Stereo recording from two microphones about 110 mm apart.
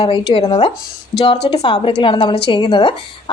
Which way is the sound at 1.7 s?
50° left (ahead or behind).